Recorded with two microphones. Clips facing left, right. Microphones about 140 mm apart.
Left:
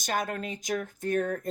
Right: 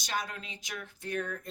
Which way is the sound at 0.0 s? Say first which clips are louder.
Left 6 dB; 50° left (ahead or behind).